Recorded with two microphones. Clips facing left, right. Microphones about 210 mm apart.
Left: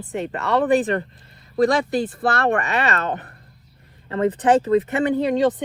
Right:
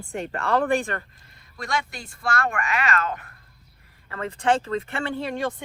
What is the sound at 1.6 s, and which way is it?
Speech, 35° left (ahead or behind).